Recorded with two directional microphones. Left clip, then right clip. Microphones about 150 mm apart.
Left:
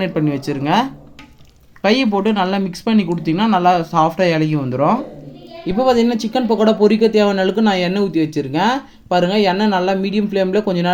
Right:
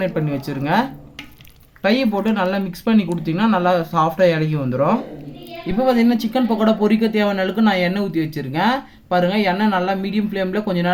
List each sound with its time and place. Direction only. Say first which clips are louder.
0.0 s speech: left 3 dB; 20° left (ahead or behind)